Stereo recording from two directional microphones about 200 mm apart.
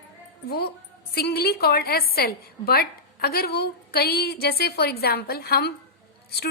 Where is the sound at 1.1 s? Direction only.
50° left (ahead or behind).